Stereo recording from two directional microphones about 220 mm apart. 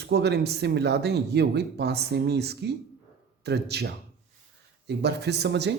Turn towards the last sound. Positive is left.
turn(degrees=-50)  # may be behind; listen again after turning